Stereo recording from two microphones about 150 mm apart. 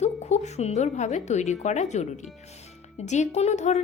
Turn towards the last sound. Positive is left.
turn(degrees=50)  # may be behind; listen again after turning